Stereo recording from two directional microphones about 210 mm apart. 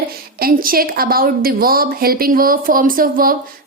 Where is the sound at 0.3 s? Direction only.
45° right (ahead or behind).